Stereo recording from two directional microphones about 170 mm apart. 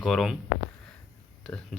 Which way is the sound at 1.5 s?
15° left (ahead or behind).